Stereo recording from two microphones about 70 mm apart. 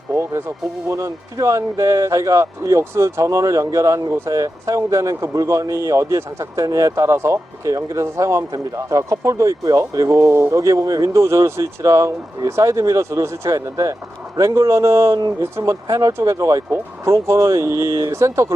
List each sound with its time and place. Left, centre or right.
0.1 s speech: right